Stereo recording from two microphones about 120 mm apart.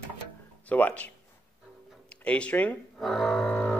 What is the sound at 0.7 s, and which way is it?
Speech, 10° left (ahead or behind).